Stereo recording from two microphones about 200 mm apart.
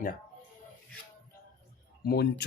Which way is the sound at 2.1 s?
50° left (ahead or behind).